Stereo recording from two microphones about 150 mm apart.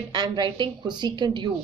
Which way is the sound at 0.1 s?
30° right (ahead or behind).